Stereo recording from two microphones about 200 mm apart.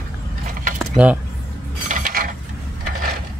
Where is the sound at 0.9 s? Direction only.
5° right (ahead or behind).